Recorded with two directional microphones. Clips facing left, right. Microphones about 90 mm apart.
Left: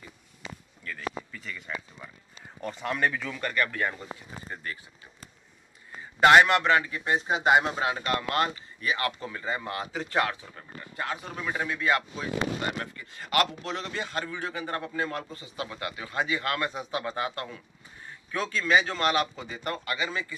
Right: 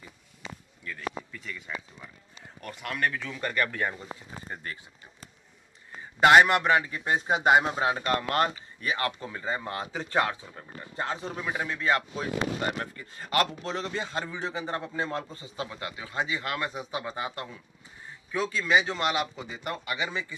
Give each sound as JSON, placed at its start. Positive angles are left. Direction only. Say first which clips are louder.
{"t": 0.8, "sound": "speech", "louder": "even", "side_deg": 0}
{"t": 3.5, "sound": "a man's voice", "louder": "left 1 dB", "side_deg": -30}
{"t": 6.1, "sound": "a man's voice", "louder": "even", "side_deg": -20}
{"t": 7.2, "sound": "a man's voice", "louder": "right 1 dB", "side_deg": -40}
{"t": 15.7, "sound": "speech", "louder": "left 2 dB", "side_deg": -20}